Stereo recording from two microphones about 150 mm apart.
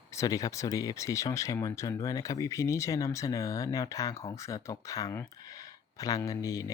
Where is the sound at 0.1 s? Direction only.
20° left (ahead or behind).